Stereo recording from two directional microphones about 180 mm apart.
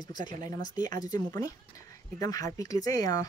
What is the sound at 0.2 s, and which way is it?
Speech, 45° right (ahead or behind).